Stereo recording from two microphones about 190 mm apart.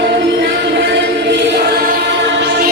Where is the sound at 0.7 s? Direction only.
70° right (ahead or behind).